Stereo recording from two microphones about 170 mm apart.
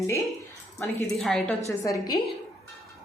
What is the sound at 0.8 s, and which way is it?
Speech, 15° left (ahead or behind).